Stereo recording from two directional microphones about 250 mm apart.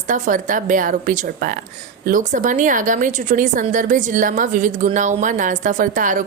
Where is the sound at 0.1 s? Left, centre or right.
Right.